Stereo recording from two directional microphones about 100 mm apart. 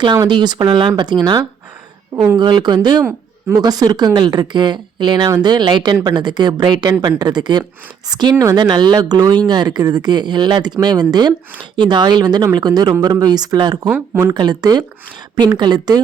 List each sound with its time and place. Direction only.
0.3 s speech: 50° right (ahead or behind)
8.5 s speech: 45° right (ahead or behind)
14.1 s speech: 20° right (ahead or behind)
14.3 s speech: 45° right (ahead or behind)